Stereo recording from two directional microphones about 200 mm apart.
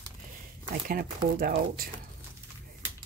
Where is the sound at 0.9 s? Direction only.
45° right (ahead or behind).